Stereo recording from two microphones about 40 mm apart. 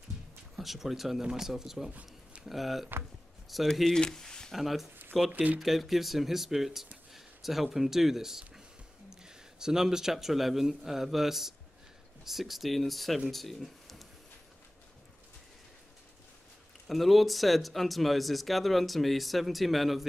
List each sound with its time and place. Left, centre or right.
0.6 s speech: centre
1.9 s a sound: right
2.4 s speech: centre
3.8 s speech: centre
4.5 s speech: centre
5.3 s speech: right
5.6 s speech: centre
16.8 s speech: centre